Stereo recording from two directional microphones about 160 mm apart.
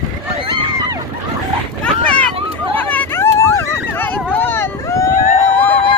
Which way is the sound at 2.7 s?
10° left (ahead or behind).